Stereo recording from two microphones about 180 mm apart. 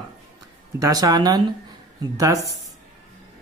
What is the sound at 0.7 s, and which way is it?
A woman's voice, 20° right (ahead or behind).